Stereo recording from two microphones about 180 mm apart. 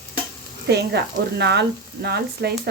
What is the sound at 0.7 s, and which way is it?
Speech, 70° right (ahead or behind).